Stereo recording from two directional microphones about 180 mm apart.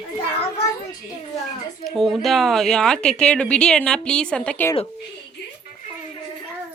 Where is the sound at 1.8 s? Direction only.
Centre (ahead or behind).